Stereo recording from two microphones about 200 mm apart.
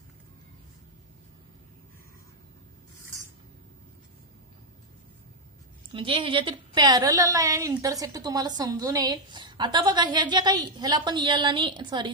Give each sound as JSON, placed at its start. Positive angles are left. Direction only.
{"t": 5.9, "sound": "a woman's voice", "side_deg": -25}